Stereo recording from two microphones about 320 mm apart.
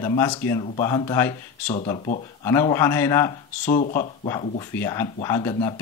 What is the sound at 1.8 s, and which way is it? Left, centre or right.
Speech, centre.